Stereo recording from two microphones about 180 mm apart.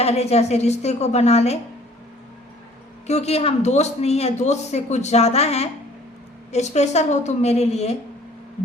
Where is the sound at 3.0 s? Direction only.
35° left (ahead or behind).